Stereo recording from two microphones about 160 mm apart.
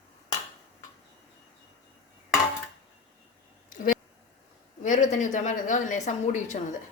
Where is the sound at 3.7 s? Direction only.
60° left (ahead or behind).